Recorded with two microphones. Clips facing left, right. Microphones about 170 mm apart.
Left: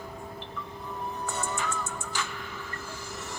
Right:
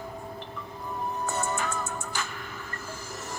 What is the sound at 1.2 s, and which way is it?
Music, 45° right (ahead or behind).